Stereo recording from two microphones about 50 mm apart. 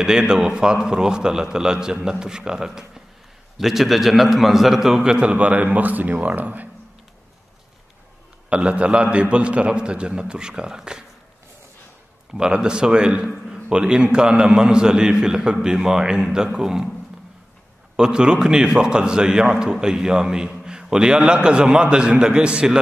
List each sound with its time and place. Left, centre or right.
0.0 s a man's voice: centre
5.2 s speech: right
8.5 s a man's voice: right
12.4 s a man's voice: centre
17.9 s a man's voice: centre